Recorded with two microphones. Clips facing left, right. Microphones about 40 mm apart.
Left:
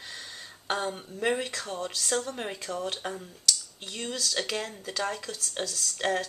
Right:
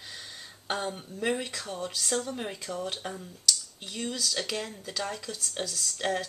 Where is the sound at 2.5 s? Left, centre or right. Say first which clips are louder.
Left 1 dB; centre.